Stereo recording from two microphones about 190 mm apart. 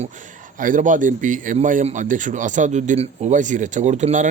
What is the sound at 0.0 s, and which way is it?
A man's voice, 40° right (ahead or behind).